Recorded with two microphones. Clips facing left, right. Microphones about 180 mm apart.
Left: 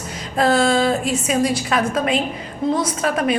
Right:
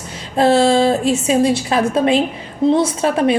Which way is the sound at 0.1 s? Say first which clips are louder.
Right 4 dB; 30° right (ahead or behind).